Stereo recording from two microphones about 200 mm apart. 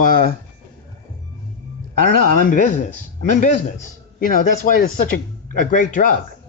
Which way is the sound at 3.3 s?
35° left (ahead or behind).